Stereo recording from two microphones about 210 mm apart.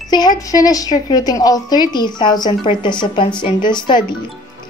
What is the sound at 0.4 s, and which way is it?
A woman's voice, 15° left (ahead or behind).